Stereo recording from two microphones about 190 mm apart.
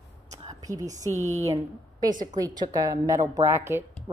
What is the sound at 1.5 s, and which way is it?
A woman's voice, 20° right (ahead or behind).